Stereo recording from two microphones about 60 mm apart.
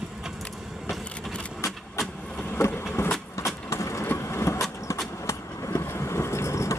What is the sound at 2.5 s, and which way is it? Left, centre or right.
Vehicle, left.